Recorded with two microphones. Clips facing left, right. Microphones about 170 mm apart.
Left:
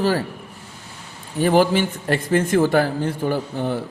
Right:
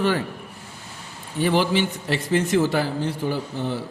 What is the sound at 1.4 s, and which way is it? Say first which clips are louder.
Speech: left 4 dB; 45° left (ahead or behind).